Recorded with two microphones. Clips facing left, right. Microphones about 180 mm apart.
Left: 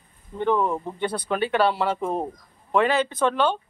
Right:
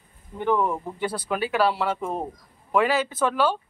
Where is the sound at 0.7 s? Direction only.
5° right (ahead or behind).